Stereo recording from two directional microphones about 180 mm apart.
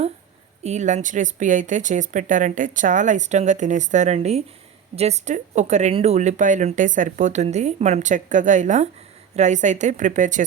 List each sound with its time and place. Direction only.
0.6 s speech: 40° right (ahead or behind)